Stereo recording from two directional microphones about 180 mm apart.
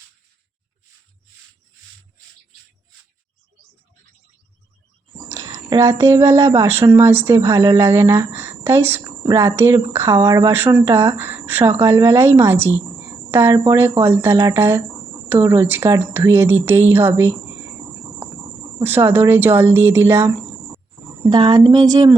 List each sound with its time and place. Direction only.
5.5 s a woman's voice: 15° right (ahead or behind)
18.8 s a woman's voice: 10° right (ahead or behind)